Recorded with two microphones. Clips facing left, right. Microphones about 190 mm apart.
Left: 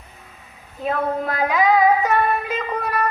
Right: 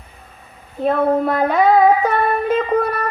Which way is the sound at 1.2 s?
55° right (ahead or behind).